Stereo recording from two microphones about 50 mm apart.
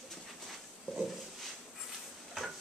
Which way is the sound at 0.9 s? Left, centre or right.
Centre.